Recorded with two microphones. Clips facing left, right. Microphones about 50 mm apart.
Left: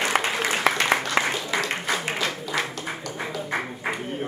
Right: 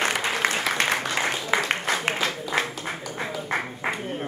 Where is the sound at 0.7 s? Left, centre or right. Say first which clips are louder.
Left 4 dB; left.